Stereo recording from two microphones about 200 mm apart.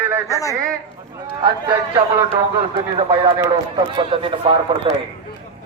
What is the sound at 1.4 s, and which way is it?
Speech, 20° right (ahead or behind).